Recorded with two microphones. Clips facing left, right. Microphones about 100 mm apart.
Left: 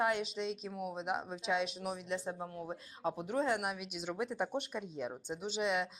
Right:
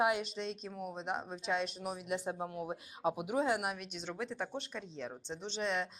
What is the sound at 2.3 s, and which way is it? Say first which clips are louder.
A woman's voice: right 2 dB; 15° right (ahead or behind).